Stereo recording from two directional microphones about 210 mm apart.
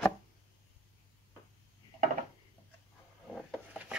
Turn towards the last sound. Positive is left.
turn(degrees=-5)  # may be behind; listen again after turning